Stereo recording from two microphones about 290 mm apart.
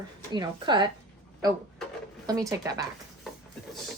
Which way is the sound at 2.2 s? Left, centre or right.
Centre.